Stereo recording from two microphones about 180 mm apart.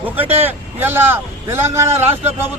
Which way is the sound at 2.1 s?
35° right (ahead or behind).